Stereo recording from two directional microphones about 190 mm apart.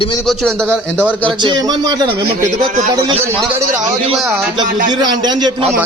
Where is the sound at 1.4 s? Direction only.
20° right (ahead or behind).